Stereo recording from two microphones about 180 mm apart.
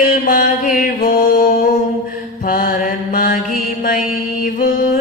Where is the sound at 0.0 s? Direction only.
50° left (ahead or behind).